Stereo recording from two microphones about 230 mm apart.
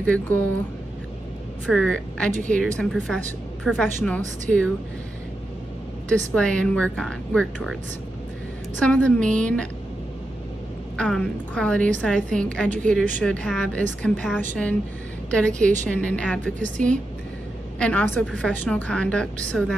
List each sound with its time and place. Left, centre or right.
0.0 s speech: centre
1.7 s a woman's voice: centre
6.0 s a woman's voice: centre
8.7 s a woman's voice: centre
11.0 s a woman's voice: centre
17.7 s a woman's voice: centre